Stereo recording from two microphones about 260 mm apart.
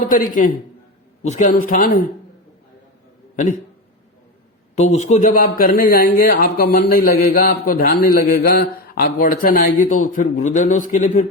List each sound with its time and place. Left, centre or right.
0.1 s speech: left
4.8 s speech: left